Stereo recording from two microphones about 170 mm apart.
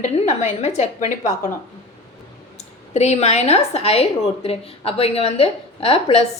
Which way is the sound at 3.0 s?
40° left (ahead or behind).